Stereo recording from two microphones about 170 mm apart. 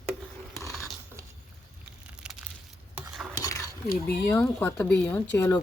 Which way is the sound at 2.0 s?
5° right (ahead or behind).